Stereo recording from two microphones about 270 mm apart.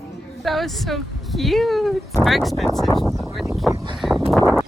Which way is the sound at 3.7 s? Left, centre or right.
Centre.